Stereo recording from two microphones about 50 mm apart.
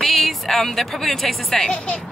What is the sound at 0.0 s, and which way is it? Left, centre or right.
A woman's voice, centre.